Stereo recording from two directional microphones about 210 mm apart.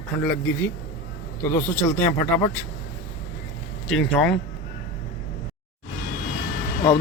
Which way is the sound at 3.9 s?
Centre (ahead or behind).